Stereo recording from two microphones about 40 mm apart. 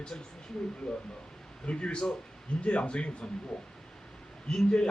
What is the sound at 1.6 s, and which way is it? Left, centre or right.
Speech, left.